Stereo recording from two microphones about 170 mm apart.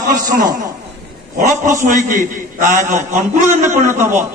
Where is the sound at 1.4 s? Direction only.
50° right (ahead or behind).